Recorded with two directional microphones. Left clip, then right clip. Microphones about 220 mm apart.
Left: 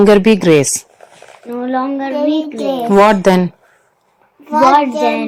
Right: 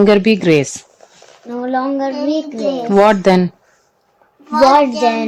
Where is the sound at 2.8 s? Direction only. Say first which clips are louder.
Left 1 dB; centre (ahead or behind).